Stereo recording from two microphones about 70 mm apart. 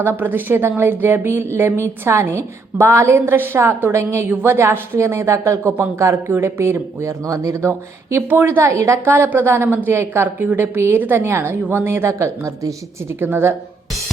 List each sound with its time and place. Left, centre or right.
0.0 s a woman's voice: right
7.0 s speech: right
7.7 s a woman's voice: right
8.6 s speech: right
9.0 s a woman's voice: right
10.2 s a woman's voice: right
13.1 s a woman's voice: right